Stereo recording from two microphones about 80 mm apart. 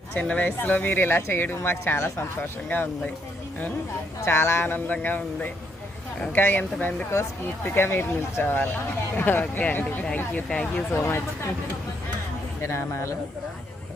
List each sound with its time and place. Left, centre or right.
0.2 s speech: centre
4.2 s speech: left
10.5 s speech: centre
10.9 s speech: left
12.6 s a man's voice: left